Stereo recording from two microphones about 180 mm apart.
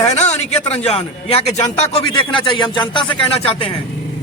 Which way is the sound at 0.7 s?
35° left (ahead or behind).